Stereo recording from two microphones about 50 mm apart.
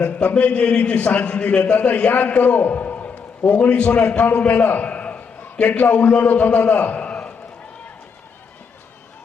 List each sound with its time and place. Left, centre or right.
0.0 s a man's voice: left